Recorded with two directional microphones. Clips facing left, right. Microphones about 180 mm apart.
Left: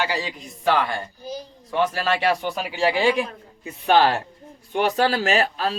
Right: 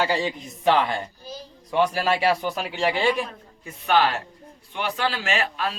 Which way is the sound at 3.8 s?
35° left (ahead or behind).